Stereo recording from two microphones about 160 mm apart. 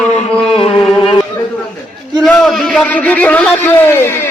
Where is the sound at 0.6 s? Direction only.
30° left (ahead or behind).